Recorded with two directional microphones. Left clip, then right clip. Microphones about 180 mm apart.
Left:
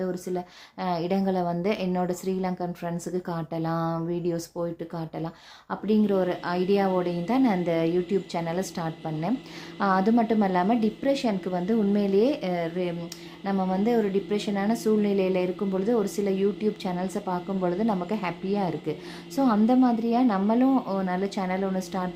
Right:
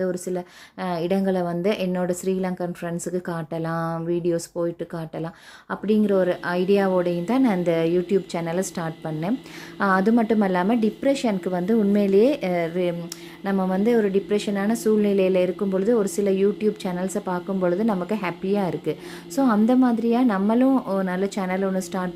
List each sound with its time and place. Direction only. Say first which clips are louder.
0.0 s speech: right 4 dB; 25° right (ahead or behind)